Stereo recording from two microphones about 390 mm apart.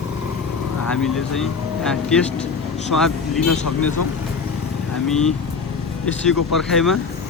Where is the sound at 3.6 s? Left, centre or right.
Left.